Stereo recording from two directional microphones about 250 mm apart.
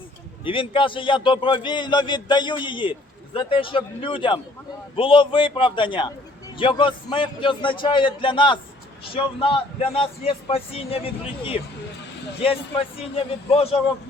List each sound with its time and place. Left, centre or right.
0.4 s a man's voice: left